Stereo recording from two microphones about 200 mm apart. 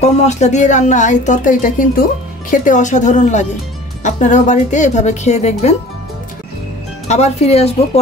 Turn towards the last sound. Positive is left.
turn(degrees=30)  # may be behind; listen again after turning